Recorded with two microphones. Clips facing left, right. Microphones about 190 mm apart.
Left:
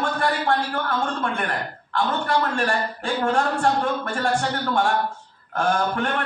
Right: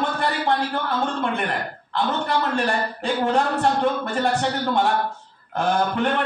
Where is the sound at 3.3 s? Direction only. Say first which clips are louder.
Even; 20° right (ahead or behind).